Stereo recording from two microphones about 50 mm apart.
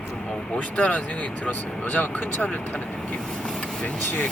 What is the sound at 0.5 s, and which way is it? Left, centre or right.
Speech, left.